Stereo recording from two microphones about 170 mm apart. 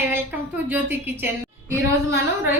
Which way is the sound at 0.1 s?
10° right (ahead or behind).